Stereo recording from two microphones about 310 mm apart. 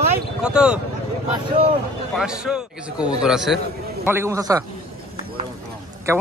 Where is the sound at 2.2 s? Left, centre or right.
Centre.